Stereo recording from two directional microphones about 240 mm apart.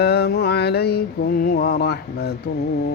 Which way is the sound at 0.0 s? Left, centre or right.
Left.